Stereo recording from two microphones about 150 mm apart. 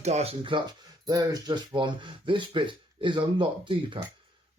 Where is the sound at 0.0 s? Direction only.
45° right (ahead or behind).